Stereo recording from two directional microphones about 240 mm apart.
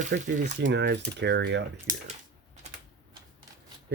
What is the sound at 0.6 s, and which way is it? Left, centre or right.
Speech, right.